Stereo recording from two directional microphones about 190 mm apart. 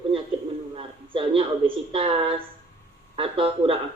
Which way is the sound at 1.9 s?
30° right (ahead or behind).